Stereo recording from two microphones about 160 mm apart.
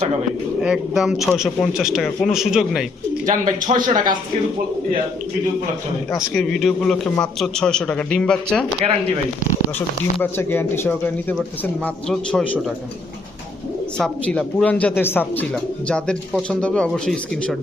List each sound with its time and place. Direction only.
0.6 s a man's voice: 5° right (ahead or behind)
3.2 s a man's voice: 55° right (ahead or behind)
6.3 s a man's voice: 5° left (ahead or behind)
8.8 s speech: 35° right (ahead or behind)
10.2 s a man's voice: 15° left (ahead or behind)
14.0 s speech: 10° left (ahead or behind)